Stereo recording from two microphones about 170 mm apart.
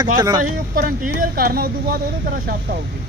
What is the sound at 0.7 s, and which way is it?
Speech, 55° right (ahead or behind).